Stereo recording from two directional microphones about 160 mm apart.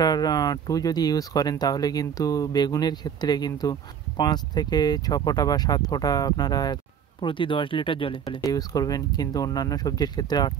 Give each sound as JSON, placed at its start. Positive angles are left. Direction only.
{"t": 0.0, "sound": "speech", "side_deg": 25}
{"t": 8.4, "sound": "speech", "side_deg": 20}